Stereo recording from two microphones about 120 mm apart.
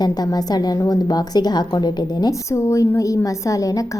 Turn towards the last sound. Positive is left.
turn(degrees=25)  # may be behind; listen again after turning